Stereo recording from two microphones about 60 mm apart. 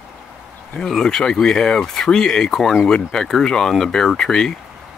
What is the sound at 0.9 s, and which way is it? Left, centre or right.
Speech, centre.